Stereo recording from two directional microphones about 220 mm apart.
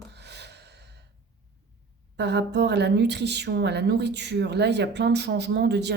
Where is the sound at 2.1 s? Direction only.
50° right (ahead or behind).